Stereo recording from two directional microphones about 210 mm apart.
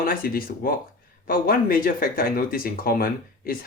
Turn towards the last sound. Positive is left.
turn(degrees=45)  # may be behind; listen again after turning